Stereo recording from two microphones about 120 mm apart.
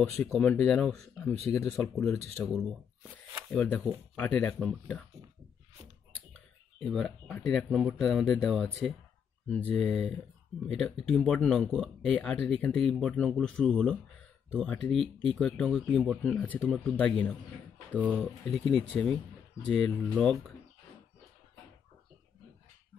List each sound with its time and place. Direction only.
0.1 s speech: 5° left (ahead or behind)
1.5 s speech: 25° left (ahead or behind)
2.0 s speech: 5° left (ahead or behind)
6.8 s speech: centre (ahead or behind)
9.5 s speech: 10° left (ahead or behind)